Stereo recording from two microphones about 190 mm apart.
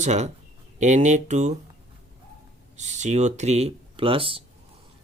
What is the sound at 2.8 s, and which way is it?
Speech, 40° right (ahead or behind).